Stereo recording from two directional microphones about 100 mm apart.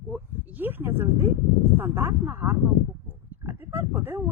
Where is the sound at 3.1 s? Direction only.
20° right (ahead or behind).